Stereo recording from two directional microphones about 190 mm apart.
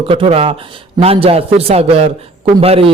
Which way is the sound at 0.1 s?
30° right (ahead or behind).